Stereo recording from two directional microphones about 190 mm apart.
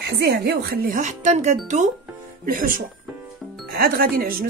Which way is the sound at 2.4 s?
45° right (ahead or behind).